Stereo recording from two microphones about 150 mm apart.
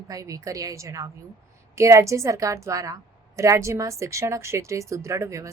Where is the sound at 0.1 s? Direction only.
20° right (ahead or behind).